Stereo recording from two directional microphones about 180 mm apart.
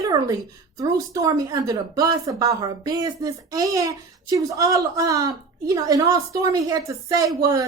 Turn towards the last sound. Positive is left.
turn(degrees=-20)  # may be behind; listen again after turning